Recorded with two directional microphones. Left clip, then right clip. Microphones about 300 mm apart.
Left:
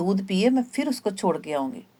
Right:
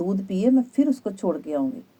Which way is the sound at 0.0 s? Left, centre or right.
Left.